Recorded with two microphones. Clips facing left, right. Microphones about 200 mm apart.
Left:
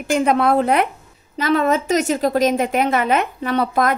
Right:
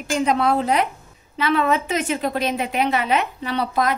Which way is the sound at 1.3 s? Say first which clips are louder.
Left 3 dB; 45° left (ahead or behind).